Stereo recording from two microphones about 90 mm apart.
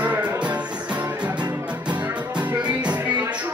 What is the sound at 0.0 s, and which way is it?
Music, 15° right (ahead or behind).